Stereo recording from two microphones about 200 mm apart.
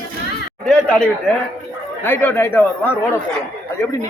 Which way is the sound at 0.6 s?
5° left (ahead or behind).